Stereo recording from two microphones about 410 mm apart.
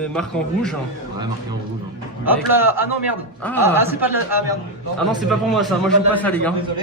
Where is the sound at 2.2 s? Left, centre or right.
Centre.